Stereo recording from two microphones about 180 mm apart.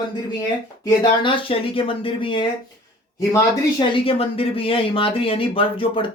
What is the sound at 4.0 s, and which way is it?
Speech, 30° left (ahead or behind).